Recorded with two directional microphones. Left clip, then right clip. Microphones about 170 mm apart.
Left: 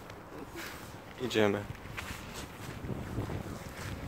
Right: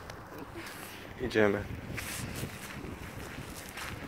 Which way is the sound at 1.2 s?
15° left (ahead or behind).